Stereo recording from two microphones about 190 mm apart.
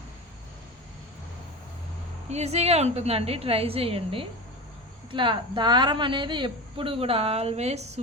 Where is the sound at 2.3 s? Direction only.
35° right (ahead or behind).